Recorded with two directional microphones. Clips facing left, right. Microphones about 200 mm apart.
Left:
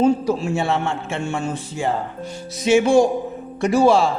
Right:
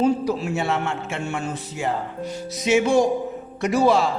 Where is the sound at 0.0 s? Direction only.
25° left (ahead or behind).